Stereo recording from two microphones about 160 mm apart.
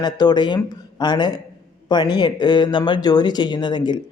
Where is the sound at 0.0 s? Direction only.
25° left (ahead or behind).